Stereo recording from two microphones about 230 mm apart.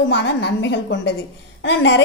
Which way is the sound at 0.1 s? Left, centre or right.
Left.